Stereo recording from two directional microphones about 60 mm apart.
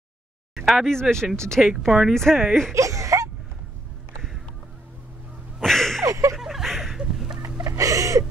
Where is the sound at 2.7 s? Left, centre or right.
Right.